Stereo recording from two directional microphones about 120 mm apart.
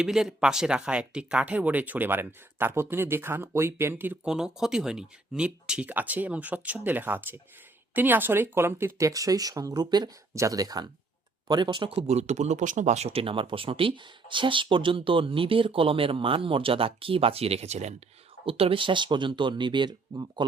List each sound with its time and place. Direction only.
0.0 s speech: 5° right (ahead or behind); by 17.9 s 65° right (ahead or behind)
18.4 s speech: 50° right (ahead or behind); by 20.4 s 35° right (ahead or behind)